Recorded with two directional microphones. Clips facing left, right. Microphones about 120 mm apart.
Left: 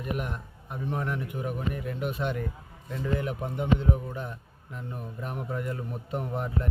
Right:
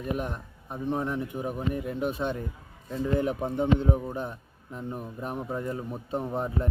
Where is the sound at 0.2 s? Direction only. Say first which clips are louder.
Right 2 dB; 30° right (ahead or behind).